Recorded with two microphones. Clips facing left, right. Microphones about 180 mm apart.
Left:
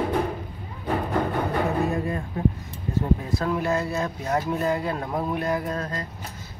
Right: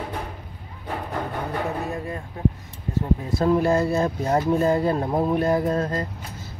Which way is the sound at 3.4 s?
30° right (ahead or behind).